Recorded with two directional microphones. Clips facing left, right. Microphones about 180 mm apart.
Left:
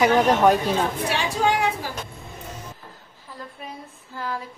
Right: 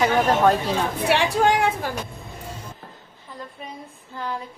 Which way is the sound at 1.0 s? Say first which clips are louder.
Right 4 dB; 60° right (ahead or behind).